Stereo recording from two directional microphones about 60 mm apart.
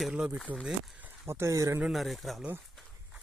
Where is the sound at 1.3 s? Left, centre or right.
Right.